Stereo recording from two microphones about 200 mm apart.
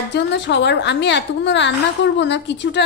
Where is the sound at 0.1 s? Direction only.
60° left (ahead or behind).